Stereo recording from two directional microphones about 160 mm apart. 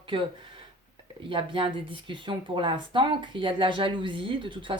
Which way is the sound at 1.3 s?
35° right (ahead or behind).